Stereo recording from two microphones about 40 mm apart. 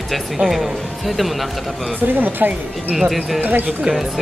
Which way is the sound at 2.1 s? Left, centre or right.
Right.